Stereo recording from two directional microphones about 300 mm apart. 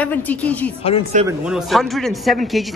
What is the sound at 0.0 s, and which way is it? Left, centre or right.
Speech, centre.